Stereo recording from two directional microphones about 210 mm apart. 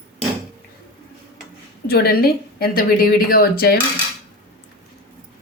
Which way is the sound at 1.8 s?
45° left (ahead or behind).